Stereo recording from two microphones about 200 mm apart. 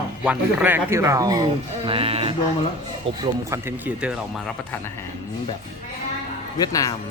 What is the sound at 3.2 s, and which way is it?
Speech, 15° right (ahead or behind).